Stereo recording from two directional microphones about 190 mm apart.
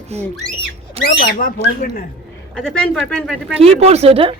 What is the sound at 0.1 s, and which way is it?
Speech, 35° right (ahead or behind).